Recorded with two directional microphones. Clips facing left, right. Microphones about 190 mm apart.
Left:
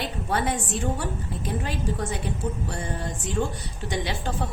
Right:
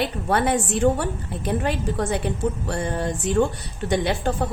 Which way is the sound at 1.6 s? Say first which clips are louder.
Right 5 dB; 65° right (ahead or behind).